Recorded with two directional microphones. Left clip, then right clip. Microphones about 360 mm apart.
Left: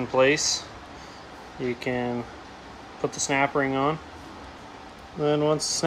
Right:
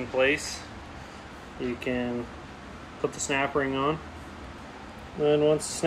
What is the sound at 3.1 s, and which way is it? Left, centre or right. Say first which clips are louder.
Speech: left 4 dB; centre.